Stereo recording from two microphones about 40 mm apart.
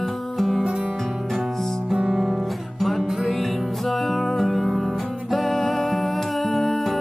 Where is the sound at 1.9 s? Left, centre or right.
Centre.